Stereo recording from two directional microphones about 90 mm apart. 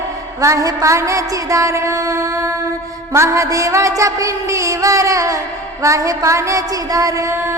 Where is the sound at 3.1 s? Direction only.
35° right (ahead or behind).